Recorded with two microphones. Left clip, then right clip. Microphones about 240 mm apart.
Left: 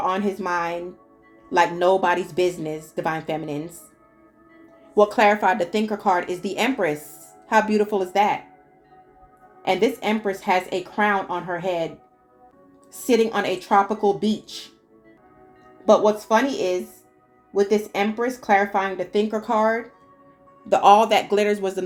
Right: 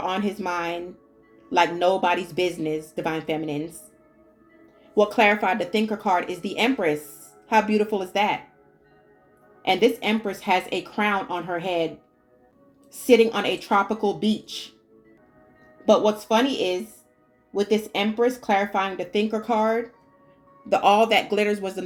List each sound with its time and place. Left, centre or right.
0.0 s a woman's voice: left
4.9 s a woman's voice: left
9.8 s a woman's voice: left
13.1 s a woman's voice: left
16.3 s a woman's voice: left